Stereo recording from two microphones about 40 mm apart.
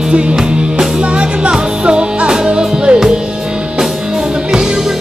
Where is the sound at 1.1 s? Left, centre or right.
Right.